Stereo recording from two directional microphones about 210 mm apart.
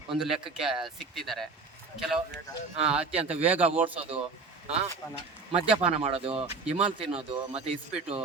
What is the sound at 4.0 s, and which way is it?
Speech, 30° right (ahead or behind).